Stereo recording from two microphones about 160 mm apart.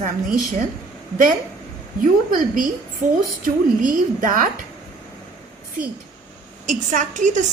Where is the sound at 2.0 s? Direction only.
60° right (ahead or behind).